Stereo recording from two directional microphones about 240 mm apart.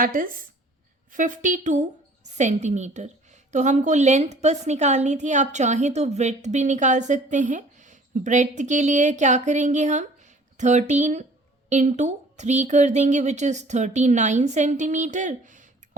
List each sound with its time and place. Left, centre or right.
0.0 s a woman's voice: right